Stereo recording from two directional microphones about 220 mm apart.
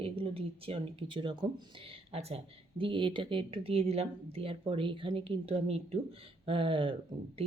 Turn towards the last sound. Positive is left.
turn(degrees=-25)  # may be behind; listen again after turning